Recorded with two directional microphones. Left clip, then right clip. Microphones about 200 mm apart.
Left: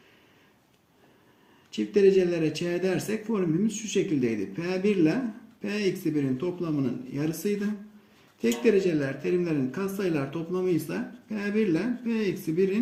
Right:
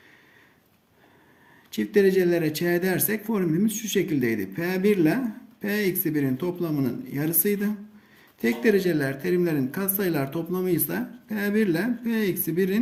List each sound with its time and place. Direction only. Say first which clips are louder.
1.7 s speech: even; 50° right (ahead or behind)